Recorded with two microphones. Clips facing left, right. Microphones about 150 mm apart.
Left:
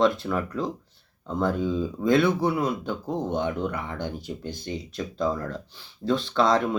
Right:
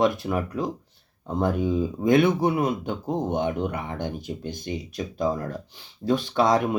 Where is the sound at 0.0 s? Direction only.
15° right (ahead or behind).